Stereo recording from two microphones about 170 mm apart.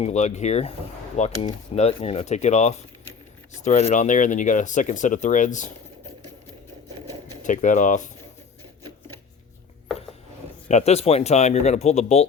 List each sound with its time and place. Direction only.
0.0 s speech: 40° left (ahead or behind)
7.4 s speech: 50° left (ahead or behind)
10.7 s speech: 40° left (ahead or behind)